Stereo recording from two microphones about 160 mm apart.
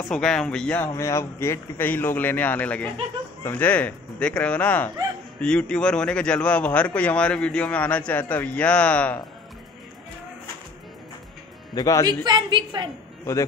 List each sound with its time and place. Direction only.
0.1 s a man's voice: 5° left (ahead or behind)
11.7 s speech: 20° left (ahead or behind)
12.1 s a woman's voice: 30° right (ahead or behind)